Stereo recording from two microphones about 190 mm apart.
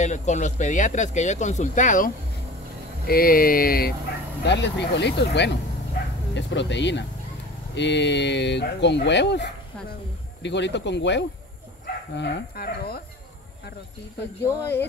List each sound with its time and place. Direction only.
0.0 s speech: 40° left (ahead or behind)
4.5 s speech: 65° left (ahead or behind)
14.4 s speech: 10° left (ahead or behind)